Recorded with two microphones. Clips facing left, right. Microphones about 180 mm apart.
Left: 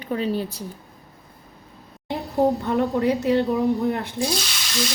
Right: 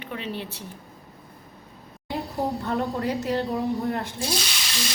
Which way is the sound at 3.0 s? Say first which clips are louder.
Left 6 dB; 65° left (ahead or behind).